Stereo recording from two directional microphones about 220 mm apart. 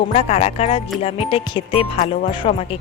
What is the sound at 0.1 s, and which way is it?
Speech, 30° left (ahead or behind).